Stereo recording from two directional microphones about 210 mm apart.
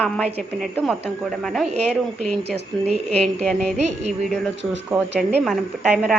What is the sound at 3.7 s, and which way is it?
Music, 30° right (ahead or behind).